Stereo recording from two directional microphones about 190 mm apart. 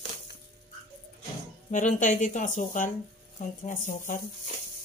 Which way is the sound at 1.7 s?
40° left (ahead or behind).